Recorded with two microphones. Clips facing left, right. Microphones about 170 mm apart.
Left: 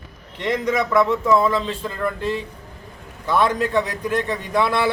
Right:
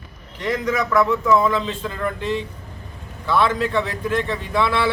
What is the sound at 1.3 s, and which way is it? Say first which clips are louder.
Speech: even; centre (ahead or behind).